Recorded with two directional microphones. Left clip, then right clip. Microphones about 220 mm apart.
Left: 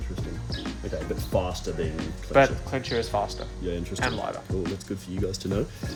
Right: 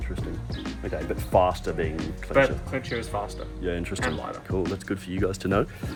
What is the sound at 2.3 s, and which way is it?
Speech, 25° left (ahead or behind).